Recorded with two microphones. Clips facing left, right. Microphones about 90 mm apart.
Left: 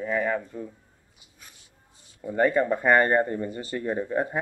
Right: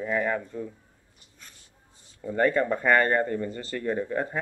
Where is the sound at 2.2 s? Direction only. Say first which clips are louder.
Left 1 dB; 15° left (ahead or behind).